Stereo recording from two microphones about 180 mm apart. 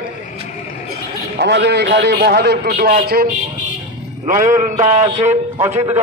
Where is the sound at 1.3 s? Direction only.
70° right (ahead or behind).